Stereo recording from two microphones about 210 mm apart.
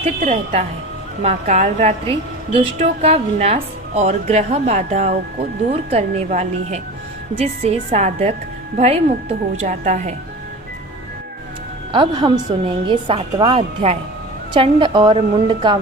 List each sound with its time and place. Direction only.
0.0 s a woman's voice: 30° right (ahead or behind)
11.9 s a woman's voice: 20° right (ahead or behind)